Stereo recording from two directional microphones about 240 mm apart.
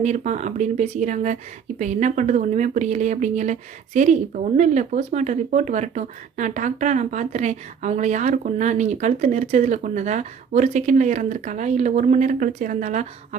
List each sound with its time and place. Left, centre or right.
0.0 s speech: right